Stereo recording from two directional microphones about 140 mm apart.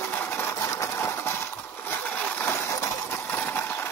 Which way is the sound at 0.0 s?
15° left (ahead or behind).